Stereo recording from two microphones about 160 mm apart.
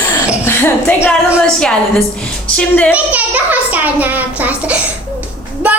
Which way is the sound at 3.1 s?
10° right (ahead or behind).